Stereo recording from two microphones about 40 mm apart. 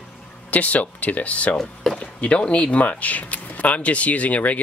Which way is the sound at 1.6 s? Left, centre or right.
Centre.